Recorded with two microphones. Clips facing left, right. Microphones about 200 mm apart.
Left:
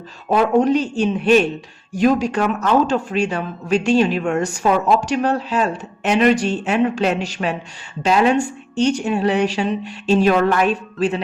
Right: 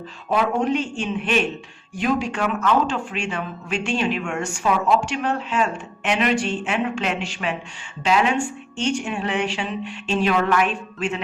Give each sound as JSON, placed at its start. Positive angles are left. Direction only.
{"t": 0.3, "sound": "speech", "side_deg": 40}